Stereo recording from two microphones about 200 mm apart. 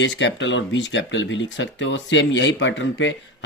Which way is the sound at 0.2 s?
65° left (ahead or behind).